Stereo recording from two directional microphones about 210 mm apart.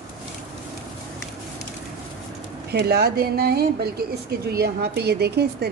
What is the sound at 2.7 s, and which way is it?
Speech, 50° right (ahead or behind).